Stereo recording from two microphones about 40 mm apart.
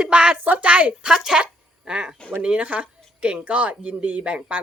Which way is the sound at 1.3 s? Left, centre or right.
Right.